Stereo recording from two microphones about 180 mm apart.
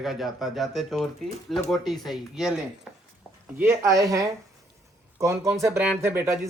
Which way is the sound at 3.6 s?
15° right (ahead or behind).